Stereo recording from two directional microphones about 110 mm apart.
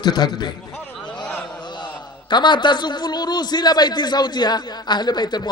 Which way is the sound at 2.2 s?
45° left (ahead or behind).